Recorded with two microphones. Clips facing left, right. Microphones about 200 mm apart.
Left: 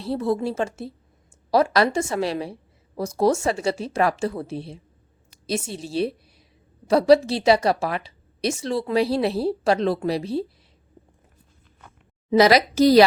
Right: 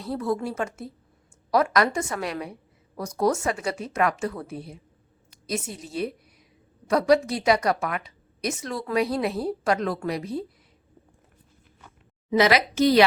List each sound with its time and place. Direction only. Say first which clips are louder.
0.0 s a woman's voice: left 3 dB; 30° left (ahead or behind)
12.3 s a woman's voice: left 4 dB; 35° left (ahead or behind)